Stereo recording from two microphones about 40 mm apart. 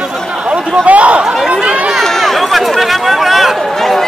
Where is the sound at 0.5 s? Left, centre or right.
Right.